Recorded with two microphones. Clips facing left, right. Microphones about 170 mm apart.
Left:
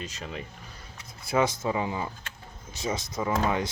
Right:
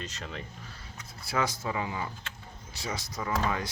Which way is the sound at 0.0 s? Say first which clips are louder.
Left 2 dB; 10° left (ahead or behind).